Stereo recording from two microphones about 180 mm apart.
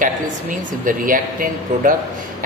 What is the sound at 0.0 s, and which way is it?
Speech, 50° right (ahead or behind).